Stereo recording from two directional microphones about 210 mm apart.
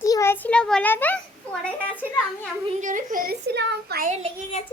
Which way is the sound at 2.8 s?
40° right (ahead or behind).